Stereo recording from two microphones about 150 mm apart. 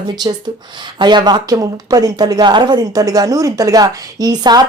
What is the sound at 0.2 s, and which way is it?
Speech, 25° right (ahead or behind).